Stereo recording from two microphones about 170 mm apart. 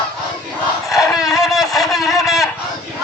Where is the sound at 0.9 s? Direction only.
20° left (ahead or behind).